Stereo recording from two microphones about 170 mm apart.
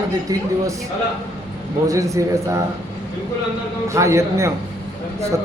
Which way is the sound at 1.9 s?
20° right (ahead or behind).